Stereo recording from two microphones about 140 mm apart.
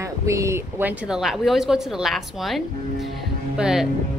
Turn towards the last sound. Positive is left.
turn(degrees=-5)  # may be behind; listen again after turning